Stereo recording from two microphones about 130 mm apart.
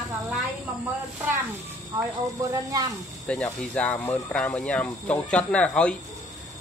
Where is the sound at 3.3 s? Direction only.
10° left (ahead or behind).